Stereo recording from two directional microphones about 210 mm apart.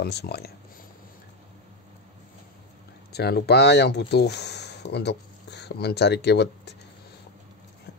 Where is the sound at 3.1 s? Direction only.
50° left (ahead or behind).